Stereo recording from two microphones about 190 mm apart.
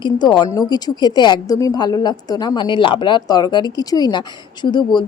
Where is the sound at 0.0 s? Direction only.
25° left (ahead or behind).